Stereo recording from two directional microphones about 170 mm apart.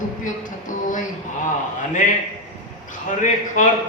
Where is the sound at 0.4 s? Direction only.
50° left (ahead or behind).